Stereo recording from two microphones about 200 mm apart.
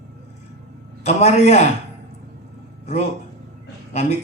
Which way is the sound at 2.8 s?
35° left (ahead or behind).